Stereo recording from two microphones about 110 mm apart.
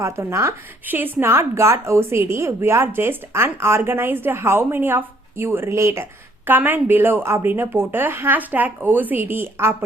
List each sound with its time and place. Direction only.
0.0 s speech: 25° right (ahead or behind)